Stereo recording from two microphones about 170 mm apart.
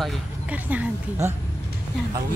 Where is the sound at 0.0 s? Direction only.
Centre (ahead or behind).